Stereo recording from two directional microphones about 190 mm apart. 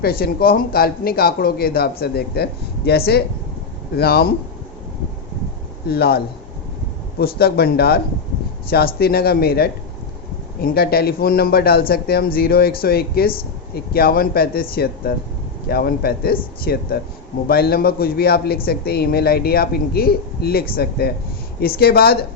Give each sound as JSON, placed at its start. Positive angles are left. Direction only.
{"t": 0.0, "sound": "a man's voice", "side_deg": 55}
{"t": 5.9, "sound": "a man's voice", "side_deg": 55}